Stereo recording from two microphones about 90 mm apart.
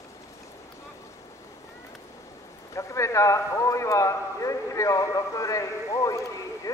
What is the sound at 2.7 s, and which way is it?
A man's voice, 35° left (ahead or behind).